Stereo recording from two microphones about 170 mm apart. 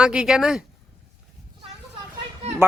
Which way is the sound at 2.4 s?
40° right (ahead or behind).